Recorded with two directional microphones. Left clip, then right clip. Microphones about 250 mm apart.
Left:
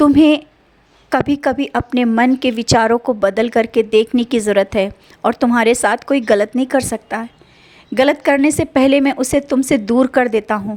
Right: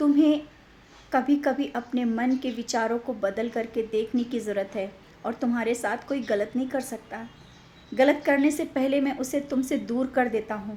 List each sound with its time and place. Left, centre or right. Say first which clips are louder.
0.0 s a woman's voice: left 11 dB; left